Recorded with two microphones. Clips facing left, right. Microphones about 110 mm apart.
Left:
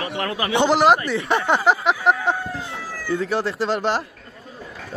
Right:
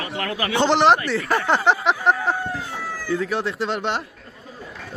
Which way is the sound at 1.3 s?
Centre (ahead or behind).